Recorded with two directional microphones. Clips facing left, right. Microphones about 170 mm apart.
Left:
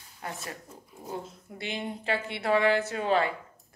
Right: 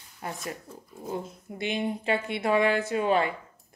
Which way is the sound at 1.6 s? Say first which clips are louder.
Right 6 dB; 20° right (ahead or behind).